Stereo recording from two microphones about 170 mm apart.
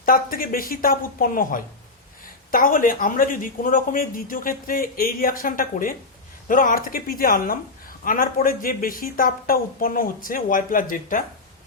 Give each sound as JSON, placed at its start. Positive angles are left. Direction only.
{"t": 0.0, "sound": "a woman's voice", "side_deg": 60}